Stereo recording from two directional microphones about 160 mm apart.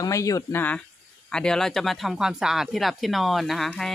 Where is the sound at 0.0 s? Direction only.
20° left (ahead or behind).